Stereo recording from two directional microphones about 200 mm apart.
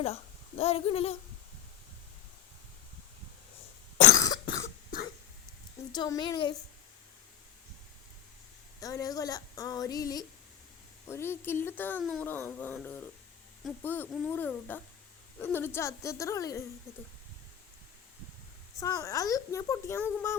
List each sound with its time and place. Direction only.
0.0 s speech: 30° left (ahead or behind)
4.1 s cough: 15° left (ahead or behind)
5.9 s a woman's voice: 20° left (ahead or behind)
8.8 s speech: 15° left (ahead or behind)
18.8 s speech: 15° left (ahead or behind)